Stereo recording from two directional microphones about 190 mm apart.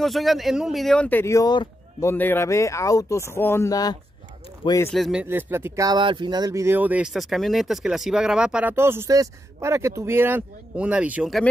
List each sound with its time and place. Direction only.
0.0 s speech: centre (ahead or behind); by 4.9 s 15° left (ahead or behind)
4.9 s speech: centre (ahead or behind)